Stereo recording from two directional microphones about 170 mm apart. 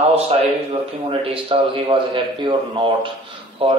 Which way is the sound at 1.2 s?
30° right (ahead or behind).